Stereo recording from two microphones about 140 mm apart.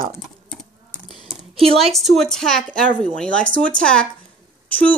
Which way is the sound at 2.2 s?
5° left (ahead or behind).